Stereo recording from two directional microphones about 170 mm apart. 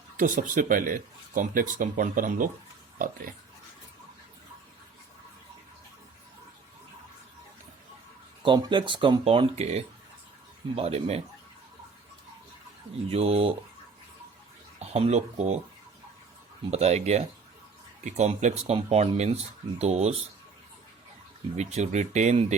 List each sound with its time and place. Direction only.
0.2 s speech: 50° right (ahead or behind)
8.4 s speech: 25° right (ahead or behind)
13.1 s speech: 35° right (ahead or behind)
14.8 s speech: 40° right (ahead or behind)
16.7 s speech: 40° right (ahead or behind)
21.5 s speech: 40° right (ahead or behind)